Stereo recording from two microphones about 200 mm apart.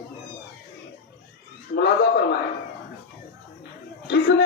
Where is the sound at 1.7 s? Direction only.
55° left (ahead or behind).